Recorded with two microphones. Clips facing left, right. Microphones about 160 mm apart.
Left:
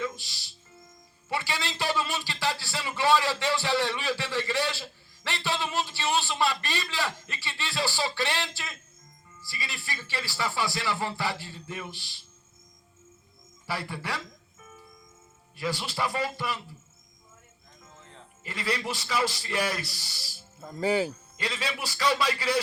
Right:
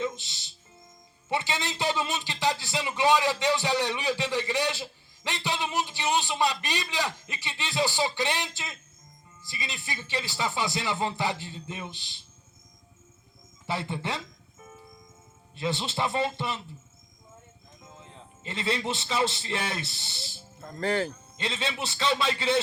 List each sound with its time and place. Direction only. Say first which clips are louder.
0.0 s music: right 2 dB; 20° right (ahead or behind)
1.3 s a man's voice: right 2 dB; 20° right (ahead or behind)
13.7 s speech: right 2 dB; 20° right (ahead or behind)
14.6 s music: right 3 dB; 25° right (ahead or behind)
15.5 s speech: right 2 dB; 25° right (ahead or behind)
17.9 s a man's voice: right 2 dB; 15° right (ahead or behind)
20.6 s speech: left 2 dB; 10° left (ahead or behind)
21.3 s speech: right 2 dB; 25° right (ahead or behind)